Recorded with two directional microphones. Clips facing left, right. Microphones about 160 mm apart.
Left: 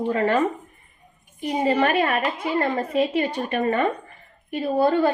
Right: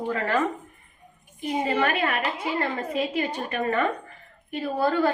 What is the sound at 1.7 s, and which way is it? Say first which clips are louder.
A woman's voice: left 5 dB; 30° left (ahead or behind).